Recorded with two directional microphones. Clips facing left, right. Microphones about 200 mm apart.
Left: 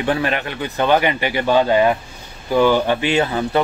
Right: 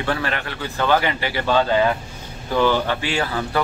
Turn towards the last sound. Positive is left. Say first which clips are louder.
# left 5 dB
turn(degrees=20)  # may be behind; listen again after turning